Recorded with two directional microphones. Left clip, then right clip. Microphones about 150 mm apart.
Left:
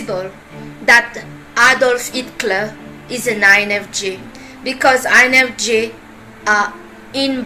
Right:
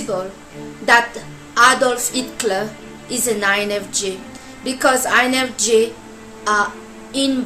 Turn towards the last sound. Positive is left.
turn(degrees=-30)  # may be behind; listen again after turning